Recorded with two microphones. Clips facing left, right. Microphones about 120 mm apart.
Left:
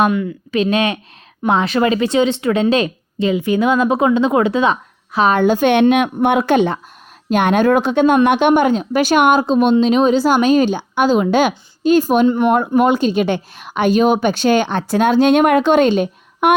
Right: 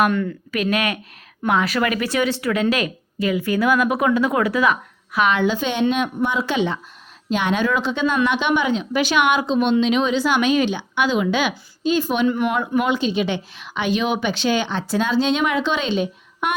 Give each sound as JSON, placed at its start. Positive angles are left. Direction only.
{"t": 0.1, "sound": "speech", "side_deg": 10}
{"t": 0.5, "sound": "a woman's voice", "side_deg": 25}
{"t": 5.3, "sound": "a woman's voice", "side_deg": 50}